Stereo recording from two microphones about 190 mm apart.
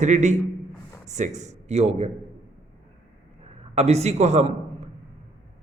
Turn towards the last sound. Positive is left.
turn(degrees=-35)  # may be behind; listen again after turning